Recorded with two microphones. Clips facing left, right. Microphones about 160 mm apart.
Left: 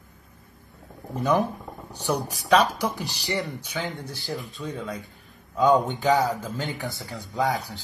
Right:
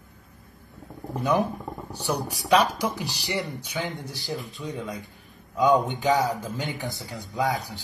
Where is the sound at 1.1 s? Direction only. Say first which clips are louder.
Left 1 dB; 15° right (ahead or behind).